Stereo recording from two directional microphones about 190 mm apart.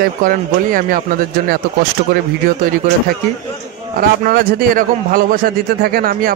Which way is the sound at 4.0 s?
50° right (ahead or behind).